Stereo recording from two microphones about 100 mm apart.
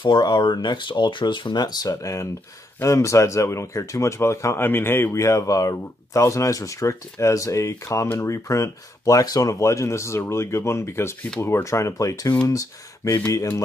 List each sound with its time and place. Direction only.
0.0 s speech: 50° left (ahead or behind)